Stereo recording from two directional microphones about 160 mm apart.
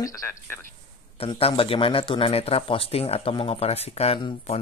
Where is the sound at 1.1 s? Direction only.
35° left (ahead or behind).